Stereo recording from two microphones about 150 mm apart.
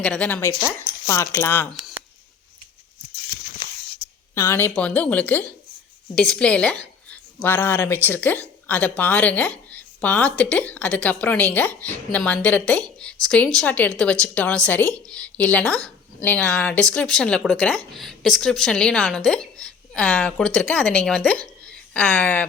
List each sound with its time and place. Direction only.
0.0 s speech: 5° left (ahead or behind)
4.4 s a woman's voice: 15° left (ahead or behind)